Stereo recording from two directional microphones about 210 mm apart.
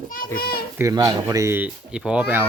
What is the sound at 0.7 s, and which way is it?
Speech, 15° right (ahead or behind).